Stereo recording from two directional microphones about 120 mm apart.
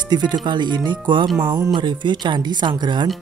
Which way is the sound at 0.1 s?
35° right (ahead or behind).